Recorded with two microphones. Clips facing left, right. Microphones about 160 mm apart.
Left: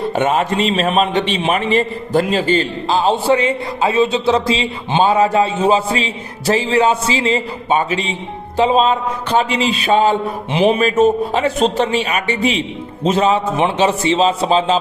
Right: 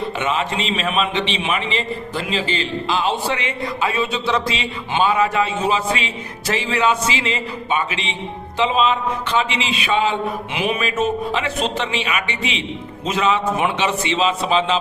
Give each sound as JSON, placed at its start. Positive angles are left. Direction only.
{"t": 0.2, "sound": "a man's voice", "side_deg": 45}